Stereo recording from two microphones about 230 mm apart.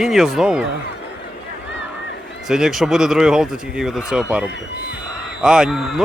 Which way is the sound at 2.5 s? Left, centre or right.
Centre.